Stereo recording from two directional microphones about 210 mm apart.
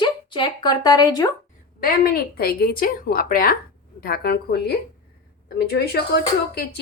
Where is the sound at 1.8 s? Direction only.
45° left (ahead or behind).